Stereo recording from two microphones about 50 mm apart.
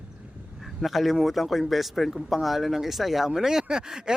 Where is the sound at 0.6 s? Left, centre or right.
Centre.